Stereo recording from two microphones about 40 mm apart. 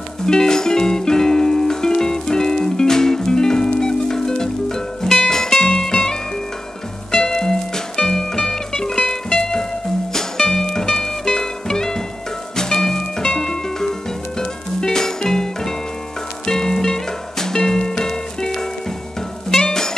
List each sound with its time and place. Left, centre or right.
0.3 s music: centre